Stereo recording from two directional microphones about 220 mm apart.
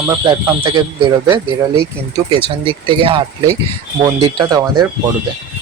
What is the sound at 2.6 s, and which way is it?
Speech, 25° right (ahead or behind).